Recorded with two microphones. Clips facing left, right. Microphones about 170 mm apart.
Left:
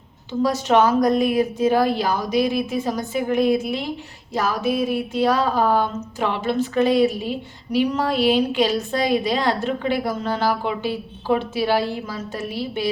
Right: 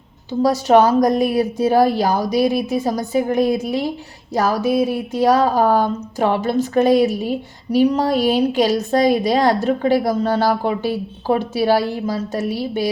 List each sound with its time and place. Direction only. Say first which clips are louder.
0.3 s speech: right 5 dB; 35° right (ahead or behind)